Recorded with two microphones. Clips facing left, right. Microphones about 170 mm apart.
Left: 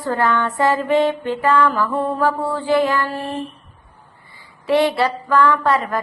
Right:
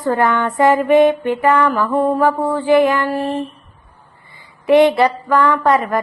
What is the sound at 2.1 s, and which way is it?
Speech, 20° right (ahead or behind).